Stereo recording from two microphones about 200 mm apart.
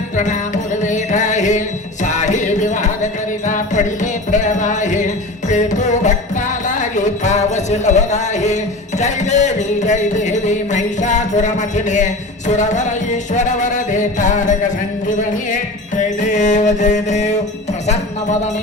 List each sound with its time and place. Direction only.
0.2 s music: 35° left (ahead or behind)
16.0 s mantra: 35° left (ahead or behind)